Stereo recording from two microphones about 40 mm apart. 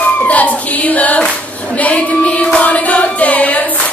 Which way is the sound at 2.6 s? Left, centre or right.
Left.